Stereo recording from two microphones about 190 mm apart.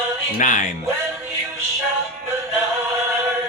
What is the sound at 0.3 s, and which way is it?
Speech, 45° left (ahead or behind).